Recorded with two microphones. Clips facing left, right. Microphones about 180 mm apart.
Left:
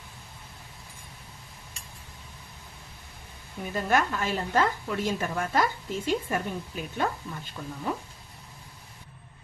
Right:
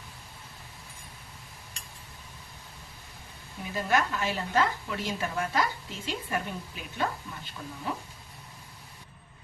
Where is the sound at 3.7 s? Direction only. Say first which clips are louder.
Left 2 dB; 45° left (ahead or behind).